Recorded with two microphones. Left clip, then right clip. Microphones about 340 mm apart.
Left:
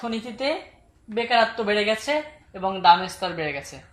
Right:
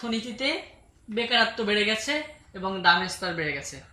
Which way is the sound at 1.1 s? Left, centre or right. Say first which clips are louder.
Left 3 dB; centre.